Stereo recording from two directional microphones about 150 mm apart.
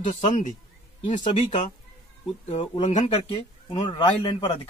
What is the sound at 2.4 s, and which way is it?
Speech, 45° left (ahead or behind).